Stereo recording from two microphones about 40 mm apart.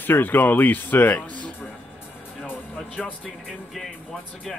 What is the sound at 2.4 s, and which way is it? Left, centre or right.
Music, left.